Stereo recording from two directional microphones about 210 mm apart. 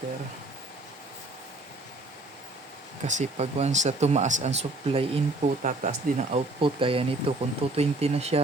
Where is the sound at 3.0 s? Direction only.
35° right (ahead or behind).